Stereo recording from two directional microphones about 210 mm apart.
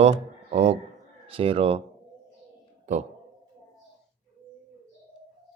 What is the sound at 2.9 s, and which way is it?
Speech, 35° right (ahead or behind).